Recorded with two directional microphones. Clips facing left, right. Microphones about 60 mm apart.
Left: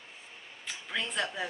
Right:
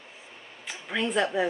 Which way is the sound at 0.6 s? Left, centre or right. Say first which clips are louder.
Right 6 dB; centre.